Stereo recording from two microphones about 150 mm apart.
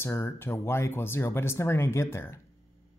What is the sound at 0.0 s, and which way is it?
Speech, 15° left (ahead or behind).